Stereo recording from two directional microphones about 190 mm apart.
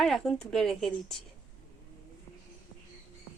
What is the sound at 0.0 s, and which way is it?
Speech, centre (ahead or behind).